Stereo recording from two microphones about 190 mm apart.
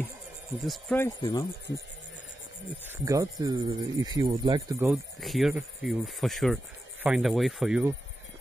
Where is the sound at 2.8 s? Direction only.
15° right (ahead or behind).